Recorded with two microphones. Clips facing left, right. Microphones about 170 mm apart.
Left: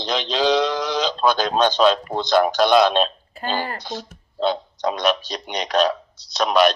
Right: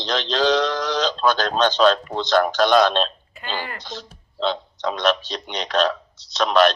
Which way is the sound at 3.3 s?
45° left (ahead or behind).